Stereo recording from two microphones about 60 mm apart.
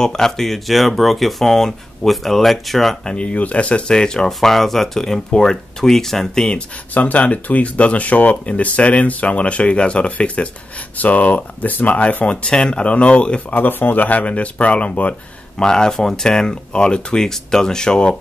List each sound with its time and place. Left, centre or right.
0.0 s speech: centre
3.1 s speech: centre
6.9 s speech: left
13.6 s speech: left
15.5 s speech: centre